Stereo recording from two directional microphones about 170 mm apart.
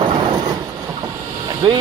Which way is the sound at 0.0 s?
25° right (ahead or behind).